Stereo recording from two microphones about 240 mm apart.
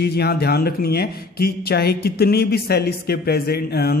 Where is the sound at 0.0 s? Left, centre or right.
Left.